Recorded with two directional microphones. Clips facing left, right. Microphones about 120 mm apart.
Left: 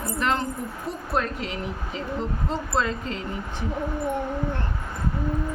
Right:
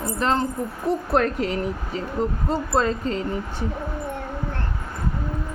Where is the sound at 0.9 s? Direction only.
70° right (ahead or behind).